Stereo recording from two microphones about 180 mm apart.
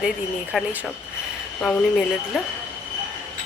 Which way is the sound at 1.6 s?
Centre (ahead or behind).